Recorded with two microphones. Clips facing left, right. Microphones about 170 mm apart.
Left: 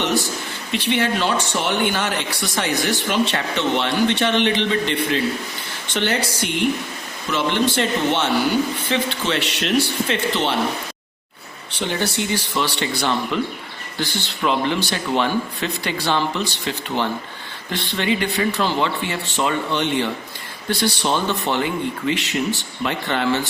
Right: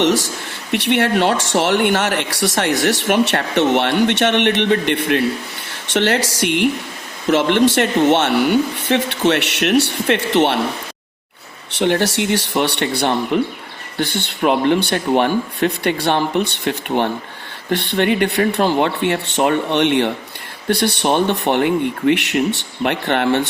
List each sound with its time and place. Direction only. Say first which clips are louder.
0.0 s speech: right 5 dB; 85° right
0.7 s speech: right 4 dB; 65° right (ahead or behind)
5.9 s speech: right 5 dB; 80° right
11.8 s speech: right 7 dB; 75° right (ahead or behind)